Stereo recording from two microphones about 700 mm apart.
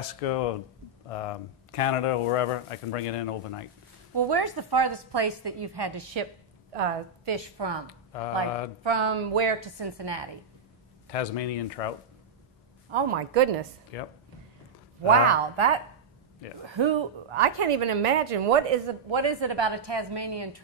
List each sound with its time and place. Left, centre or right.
0.0 s speech: left
4.1 s a woman's voice: right
6.7 s a woman's voice: right
7.4 s a woman's voice: right
8.8 s a woman's voice: right
11.1 s speech: left
12.9 s a woman's voice: right
13.9 s speech: left
15.2 s a woman's voice: right